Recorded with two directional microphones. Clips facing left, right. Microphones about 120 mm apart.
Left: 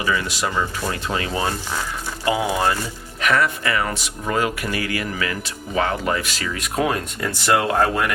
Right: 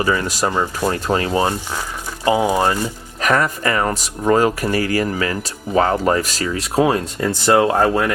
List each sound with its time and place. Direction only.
0.0 s speech: 40° right (ahead or behind)
3.2 s speech: 40° right (ahead or behind)